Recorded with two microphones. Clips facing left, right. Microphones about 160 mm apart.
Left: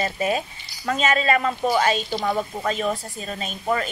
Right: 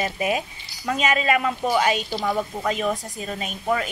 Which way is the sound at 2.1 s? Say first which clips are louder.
Left 1 dB; 5° right (ahead or behind).